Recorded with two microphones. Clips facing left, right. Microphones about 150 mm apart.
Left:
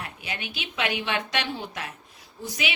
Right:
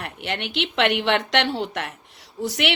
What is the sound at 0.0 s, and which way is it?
A woman's voice, 70° right (ahead or behind).